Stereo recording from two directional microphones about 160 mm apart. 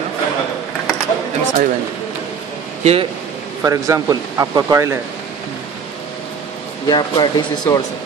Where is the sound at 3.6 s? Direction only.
20° right (ahead or behind).